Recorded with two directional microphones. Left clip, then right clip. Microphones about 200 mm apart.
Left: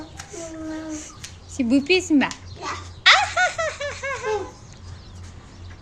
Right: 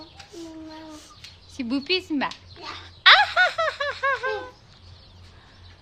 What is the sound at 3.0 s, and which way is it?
Laughter, 35° right (ahead or behind).